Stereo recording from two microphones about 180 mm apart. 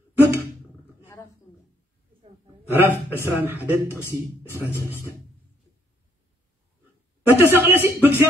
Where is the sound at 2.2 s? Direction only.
30° right (ahead or behind).